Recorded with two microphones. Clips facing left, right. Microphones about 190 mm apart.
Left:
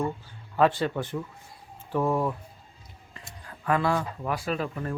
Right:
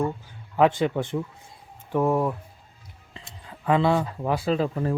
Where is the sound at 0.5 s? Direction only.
15° right (ahead or behind).